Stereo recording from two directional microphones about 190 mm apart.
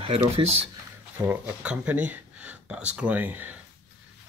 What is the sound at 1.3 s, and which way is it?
Speech, 5° right (ahead or behind).